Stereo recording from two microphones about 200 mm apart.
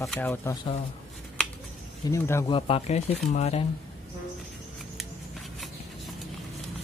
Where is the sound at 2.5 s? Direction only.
30° left (ahead or behind).